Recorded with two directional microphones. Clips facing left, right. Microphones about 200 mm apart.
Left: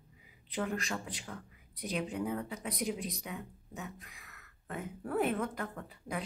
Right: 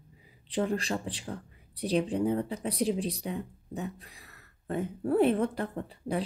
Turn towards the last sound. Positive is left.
turn(degrees=-30)  # may be behind; listen again after turning